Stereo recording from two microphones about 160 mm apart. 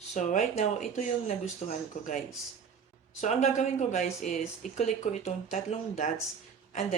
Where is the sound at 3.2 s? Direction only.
45° left (ahead or behind).